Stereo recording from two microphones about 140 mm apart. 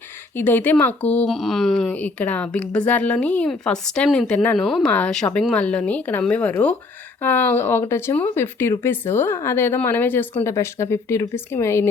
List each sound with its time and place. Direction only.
0.3 s speech: 15° left (ahead or behind)
1.3 s speech: centre (ahead or behind)
1.9 s speech: 10° left (ahead or behind)